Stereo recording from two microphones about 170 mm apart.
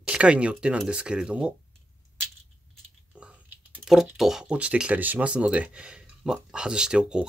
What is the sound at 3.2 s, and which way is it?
Speech, 10° right (ahead or behind).